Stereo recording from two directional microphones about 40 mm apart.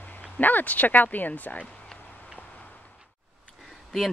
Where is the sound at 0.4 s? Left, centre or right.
Left.